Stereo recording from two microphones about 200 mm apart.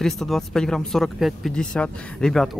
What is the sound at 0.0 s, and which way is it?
Speech, centre (ahead or behind).